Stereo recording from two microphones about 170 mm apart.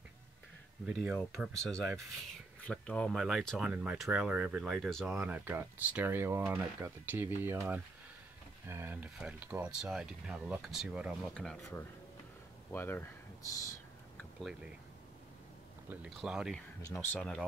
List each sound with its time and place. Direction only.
0.8 s speech: 5° right (ahead or behind)
1.1 s speech: 5° left (ahead or behind)
5.1 s speech: 10° right (ahead or behind); by 11.6 s 5° left (ahead or behind)
12.7 s speech: 10° left (ahead or behind)
15.9 s speech: 5° right (ahead or behind)
16.8 s speech: 10° left (ahead or behind)